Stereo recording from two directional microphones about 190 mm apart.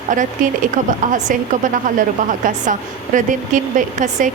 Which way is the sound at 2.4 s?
40° right (ahead or behind).